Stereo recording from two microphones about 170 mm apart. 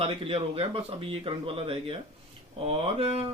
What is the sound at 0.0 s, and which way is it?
A man's voice, 35° right (ahead or behind).